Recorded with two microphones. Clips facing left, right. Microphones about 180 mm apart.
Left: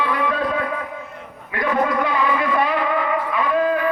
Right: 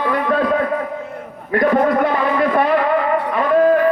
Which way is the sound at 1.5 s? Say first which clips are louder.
Right 6 dB; 45° right (ahead or behind).